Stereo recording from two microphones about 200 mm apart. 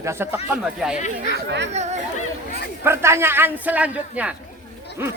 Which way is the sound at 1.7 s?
35° right (ahead or behind).